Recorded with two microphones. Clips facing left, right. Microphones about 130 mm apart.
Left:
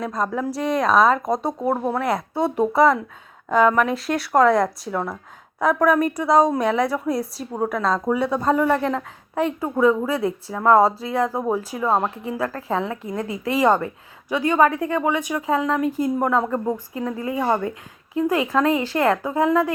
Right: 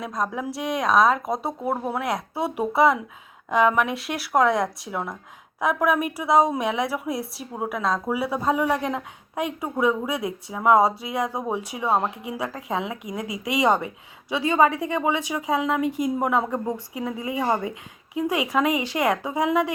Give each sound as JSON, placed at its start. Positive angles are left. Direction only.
{"t": 0.0, "sound": "a woman's voice", "side_deg": 0}